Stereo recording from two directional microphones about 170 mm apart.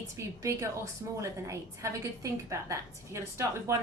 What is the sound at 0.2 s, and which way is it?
A woman's voice, 15° right (ahead or behind).